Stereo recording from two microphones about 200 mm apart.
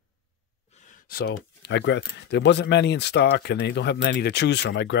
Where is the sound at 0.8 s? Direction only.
50° left (ahead or behind).